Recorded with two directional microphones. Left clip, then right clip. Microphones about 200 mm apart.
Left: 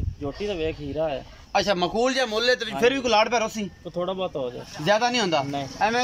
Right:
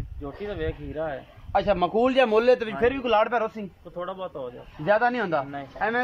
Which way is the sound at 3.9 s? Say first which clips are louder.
Left 5 dB; 15° left (ahead or behind).